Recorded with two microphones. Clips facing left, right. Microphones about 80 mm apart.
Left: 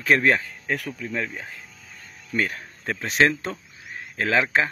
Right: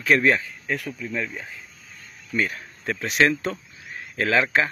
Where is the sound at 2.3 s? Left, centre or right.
Left.